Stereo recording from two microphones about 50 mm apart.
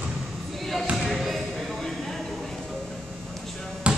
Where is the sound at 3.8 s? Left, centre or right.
Right.